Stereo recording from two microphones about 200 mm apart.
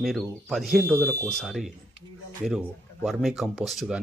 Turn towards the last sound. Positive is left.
turn(degrees=0)  # may be behind; listen again after turning